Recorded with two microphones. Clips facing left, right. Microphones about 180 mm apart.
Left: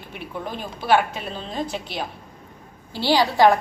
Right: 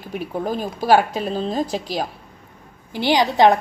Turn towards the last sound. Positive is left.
turn(degrees=-20)  # may be behind; listen again after turning